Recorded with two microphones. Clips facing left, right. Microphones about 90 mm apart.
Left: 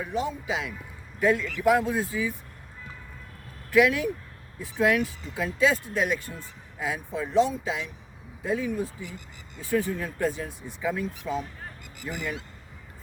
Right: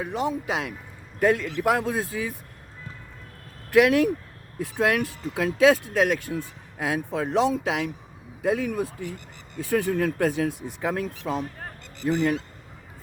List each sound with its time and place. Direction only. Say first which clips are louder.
0.0 s speech: right 3 dB; 65° right (ahead or behind)
3.7 s speech: right 3 dB; 60° right (ahead or behind)
12.0 s speech: right 11 dB; 45° right (ahead or behind)